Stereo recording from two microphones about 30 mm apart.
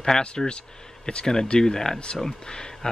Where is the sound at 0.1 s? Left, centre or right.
Left.